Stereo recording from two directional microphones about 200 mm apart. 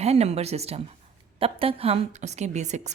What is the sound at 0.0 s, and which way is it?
A woman's voice, 30° right (ahead or behind).